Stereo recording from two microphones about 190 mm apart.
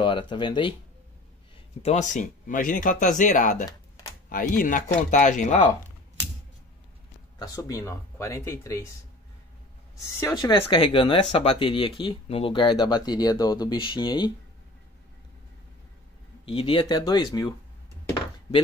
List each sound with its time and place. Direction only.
0.0 s speech: 25° left (ahead or behind)
1.8 s speech: 35° left (ahead or behind)
7.3 s speech: 20° left (ahead or behind)
9.9 s speech: 20° left (ahead or behind)
16.4 s speech: 25° left (ahead or behind)